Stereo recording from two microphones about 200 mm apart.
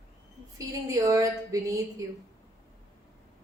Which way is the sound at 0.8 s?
15° right (ahead or behind).